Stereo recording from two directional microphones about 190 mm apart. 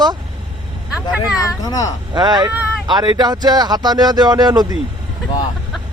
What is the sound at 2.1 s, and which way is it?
Speech, 20° right (ahead or behind).